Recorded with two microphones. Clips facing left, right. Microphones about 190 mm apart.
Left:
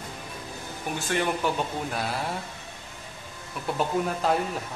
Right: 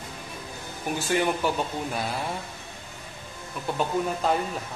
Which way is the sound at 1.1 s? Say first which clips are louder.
Right 1 dB; centre (ahead or behind).